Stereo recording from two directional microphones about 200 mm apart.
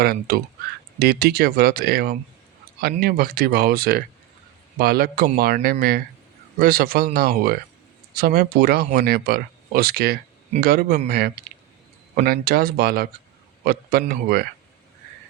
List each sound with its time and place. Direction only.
0.0 s speech: 50° right (ahead or behind)
14.1 s speech: 50° right (ahead or behind)